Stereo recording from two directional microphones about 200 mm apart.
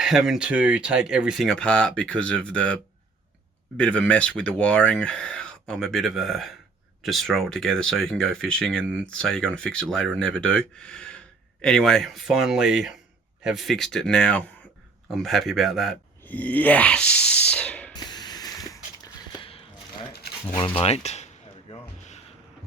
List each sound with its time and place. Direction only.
0.0 s speech: centre (ahead or behind)
3.8 s speech: 5° left (ahead or behind)
17.9 s spray: 20° left (ahead or behind)
18.7 s a sound: 15° left (ahead or behind)
19.5 s a sound: 30° left (ahead or behind)
20.7 s speech: 30° left (ahead or behind)